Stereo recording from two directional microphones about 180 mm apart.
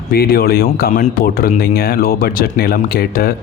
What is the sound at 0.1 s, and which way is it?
Speech, 60° left (ahead or behind).